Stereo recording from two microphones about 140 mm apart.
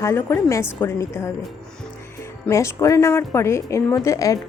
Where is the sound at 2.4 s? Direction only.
20° left (ahead or behind).